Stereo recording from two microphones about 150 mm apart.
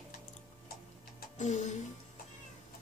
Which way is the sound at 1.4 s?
50° left (ahead or behind).